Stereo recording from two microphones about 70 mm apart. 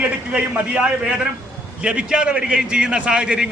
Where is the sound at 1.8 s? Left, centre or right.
Centre.